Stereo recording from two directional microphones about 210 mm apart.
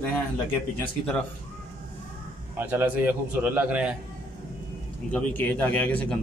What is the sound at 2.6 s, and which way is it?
A man's voice, 10° right (ahead or behind).